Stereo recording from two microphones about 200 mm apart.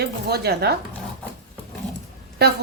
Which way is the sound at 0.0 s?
55° right (ahead or behind).